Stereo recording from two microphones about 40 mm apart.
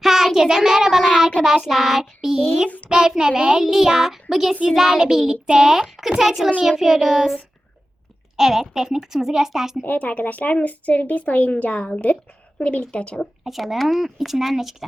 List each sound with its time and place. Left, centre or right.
0.0 s child singing: centre
1.4 s a child's voice: centre
8.4 s a child's voice: centre
9.8 s a woman's voice: left
13.4 s speech: centre